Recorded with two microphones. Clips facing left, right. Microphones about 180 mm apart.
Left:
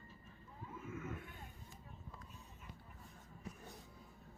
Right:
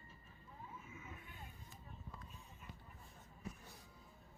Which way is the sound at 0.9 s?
50° left (ahead or behind).